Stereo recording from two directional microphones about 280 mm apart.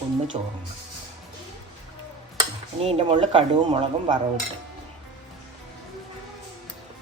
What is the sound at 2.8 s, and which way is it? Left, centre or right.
Dishes, right.